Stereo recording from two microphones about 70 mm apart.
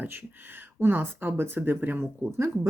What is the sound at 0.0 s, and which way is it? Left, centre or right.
Speech, right.